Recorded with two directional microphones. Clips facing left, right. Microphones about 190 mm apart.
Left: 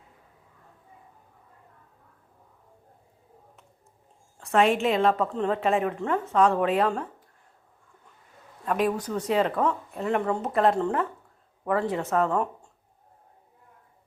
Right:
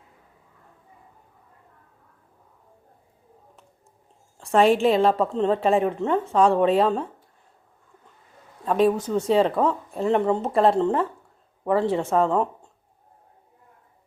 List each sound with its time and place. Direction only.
4.4 s a woman's voice: 35° right (ahead or behind)
8.6 s a woman's voice: 25° right (ahead or behind)